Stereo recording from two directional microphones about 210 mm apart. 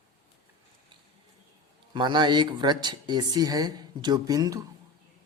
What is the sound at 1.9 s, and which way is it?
Speech, 20° right (ahead or behind).